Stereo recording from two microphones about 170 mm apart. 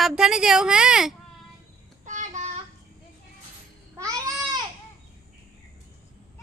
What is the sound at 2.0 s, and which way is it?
Child singing, 45° right (ahead or behind).